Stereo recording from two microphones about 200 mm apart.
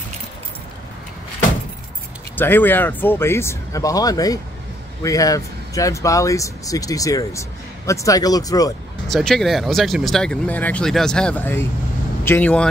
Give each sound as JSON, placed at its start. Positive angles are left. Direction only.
{"t": 2.3, "sound": "speech", "side_deg": 10}
{"t": 9.0, "sound": "speech", "side_deg": 0}